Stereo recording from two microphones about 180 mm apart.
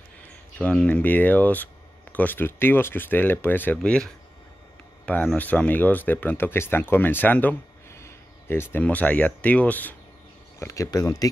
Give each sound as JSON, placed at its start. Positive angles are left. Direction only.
{"t": 0.6, "sound": "speech", "side_deg": 5}